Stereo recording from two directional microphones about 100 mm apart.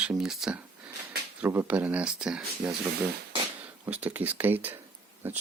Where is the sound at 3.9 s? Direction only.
15° right (ahead or behind).